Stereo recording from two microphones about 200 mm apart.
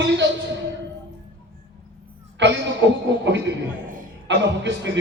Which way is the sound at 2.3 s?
65° right (ahead or behind).